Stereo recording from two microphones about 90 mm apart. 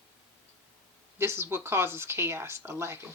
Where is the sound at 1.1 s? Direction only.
25° right (ahead or behind).